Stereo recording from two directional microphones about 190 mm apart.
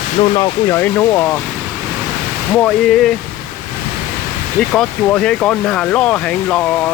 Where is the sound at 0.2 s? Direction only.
25° left (ahead or behind).